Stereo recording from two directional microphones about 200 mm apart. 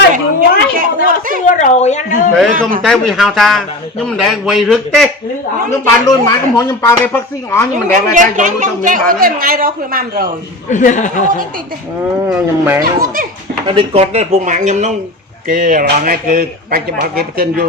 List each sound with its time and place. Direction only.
0.1 s a sound: 40° right (ahead or behind)
1.5 s speech: 35° left (ahead or behind)
2.5 s speech: 45° right (ahead or behind)
2.8 s a man's voice: centre (ahead or behind)
6.1 s speech: 15° left (ahead or behind)
8.1 s speech: 40° right (ahead or behind)
10.7 s speech: 40° left (ahead or behind)
12.3 s speech: 10° right (ahead or behind)
12.8 s speech: 45° right (ahead or behind)
13.7 s speech: 25° right (ahead or behind); by 17.7 s 50° right (ahead or behind)